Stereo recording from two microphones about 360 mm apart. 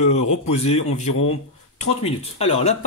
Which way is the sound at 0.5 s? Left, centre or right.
Centre.